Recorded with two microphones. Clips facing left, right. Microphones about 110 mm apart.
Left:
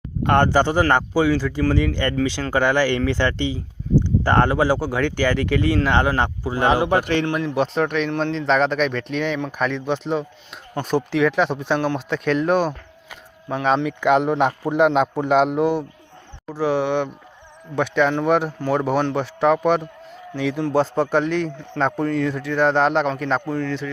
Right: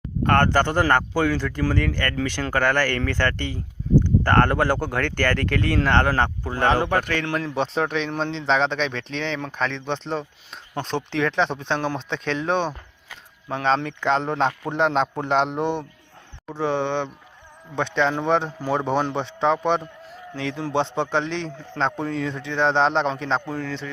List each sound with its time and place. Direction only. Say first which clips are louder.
0.3 s speech: left 2 dB; 15° left (ahead or behind)
7.3 s a man's voice: left 3 dB; 5° left (ahead or behind)